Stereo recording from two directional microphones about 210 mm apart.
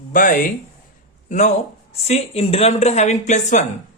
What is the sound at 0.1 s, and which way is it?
Speech, 40° left (ahead or behind).